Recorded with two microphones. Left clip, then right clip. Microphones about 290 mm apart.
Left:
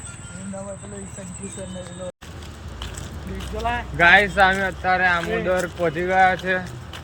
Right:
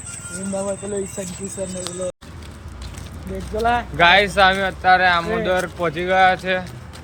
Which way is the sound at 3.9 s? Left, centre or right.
Centre.